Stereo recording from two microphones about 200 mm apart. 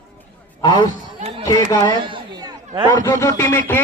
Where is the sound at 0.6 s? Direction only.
20° left (ahead or behind).